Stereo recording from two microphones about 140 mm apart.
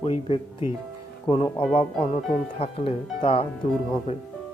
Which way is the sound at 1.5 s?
45° left (ahead or behind).